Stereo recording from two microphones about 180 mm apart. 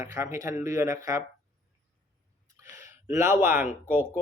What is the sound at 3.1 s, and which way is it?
Speech, 15° right (ahead or behind).